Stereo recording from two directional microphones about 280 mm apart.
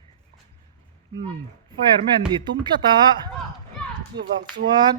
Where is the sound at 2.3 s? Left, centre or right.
Centre.